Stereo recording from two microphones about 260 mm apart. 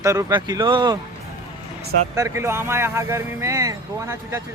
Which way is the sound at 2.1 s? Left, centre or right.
Centre.